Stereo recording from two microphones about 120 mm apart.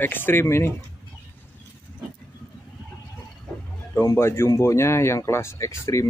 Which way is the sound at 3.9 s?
25° left (ahead or behind).